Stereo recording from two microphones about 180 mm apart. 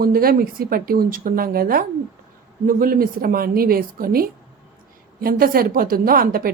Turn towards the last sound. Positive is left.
turn(degrees=-55)  # may be behind; listen again after turning